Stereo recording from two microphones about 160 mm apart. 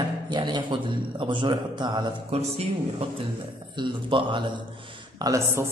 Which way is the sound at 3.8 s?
30° right (ahead or behind).